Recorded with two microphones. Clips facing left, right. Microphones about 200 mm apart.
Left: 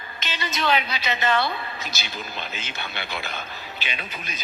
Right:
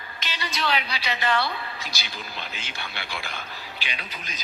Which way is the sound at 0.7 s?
20° left (ahead or behind).